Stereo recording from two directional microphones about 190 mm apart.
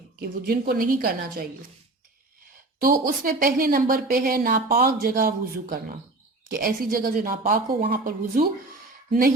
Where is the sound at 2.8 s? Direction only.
50° right (ahead or behind).